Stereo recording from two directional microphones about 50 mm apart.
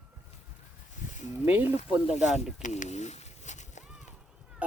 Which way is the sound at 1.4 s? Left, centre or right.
Right.